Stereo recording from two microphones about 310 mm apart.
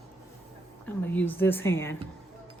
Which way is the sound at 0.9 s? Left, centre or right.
Centre.